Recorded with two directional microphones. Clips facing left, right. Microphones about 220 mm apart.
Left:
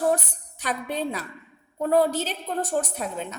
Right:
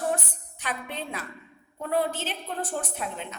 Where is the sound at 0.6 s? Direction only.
40° left (ahead or behind).